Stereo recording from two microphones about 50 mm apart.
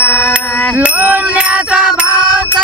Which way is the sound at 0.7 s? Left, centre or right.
Right.